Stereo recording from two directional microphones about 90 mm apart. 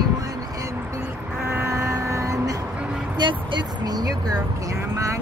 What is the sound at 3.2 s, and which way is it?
Speech, 60° right (ahead or behind).